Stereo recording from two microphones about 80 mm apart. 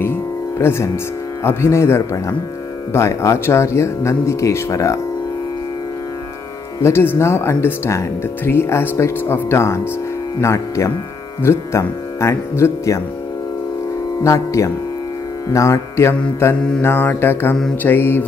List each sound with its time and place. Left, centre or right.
0.0 s music: left
1.4 s speech: left
6.8 s speech: left
14.2 s speech: left
16.8 s mantra: left